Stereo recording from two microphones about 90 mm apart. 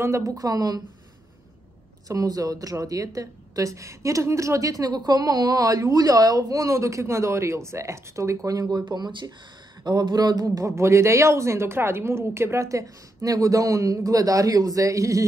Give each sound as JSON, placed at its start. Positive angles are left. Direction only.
{"t": 0.0, "sound": "a woman's voice", "side_deg": -35}
{"t": 2.0, "sound": "a woman's voice", "side_deg": -40}
{"t": 9.8, "sound": "a sound", "side_deg": -50}
{"t": 10.7, "sound": "a woman's voice", "side_deg": -30}